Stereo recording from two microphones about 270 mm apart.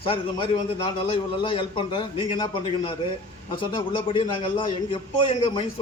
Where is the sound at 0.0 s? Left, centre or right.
Centre.